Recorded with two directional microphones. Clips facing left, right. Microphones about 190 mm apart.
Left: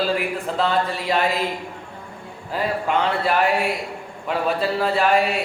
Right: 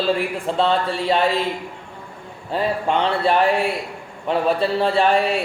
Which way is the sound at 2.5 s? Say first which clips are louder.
Right 2 dB; 30° right (ahead or behind).